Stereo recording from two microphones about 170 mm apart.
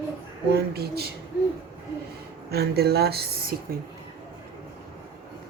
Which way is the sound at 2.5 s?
70° right (ahead or behind).